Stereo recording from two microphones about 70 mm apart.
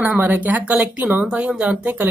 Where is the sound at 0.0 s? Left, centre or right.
Right.